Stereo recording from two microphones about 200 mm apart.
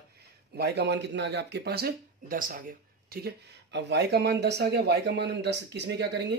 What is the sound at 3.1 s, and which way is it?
Speech, 55° right (ahead or behind).